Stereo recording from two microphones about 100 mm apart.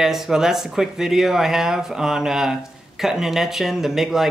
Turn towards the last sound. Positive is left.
turn(degrees=-5)  # may be behind; listen again after turning